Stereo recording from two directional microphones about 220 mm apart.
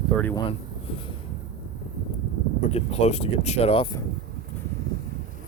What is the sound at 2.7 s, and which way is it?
Speech, 30° left (ahead or behind).